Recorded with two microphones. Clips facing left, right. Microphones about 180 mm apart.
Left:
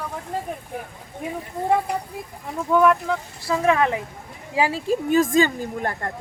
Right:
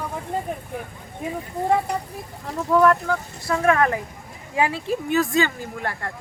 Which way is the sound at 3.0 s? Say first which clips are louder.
Even; 25° left (ahead or behind).